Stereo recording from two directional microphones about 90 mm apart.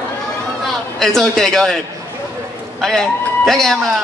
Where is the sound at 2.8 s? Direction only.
5° left (ahead or behind).